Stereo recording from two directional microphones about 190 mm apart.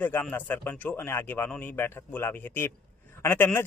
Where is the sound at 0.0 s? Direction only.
10° left (ahead or behind).